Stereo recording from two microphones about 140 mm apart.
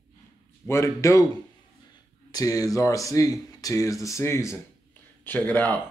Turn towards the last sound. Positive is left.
turn(degrees=10)  # may be behind; listen again after turning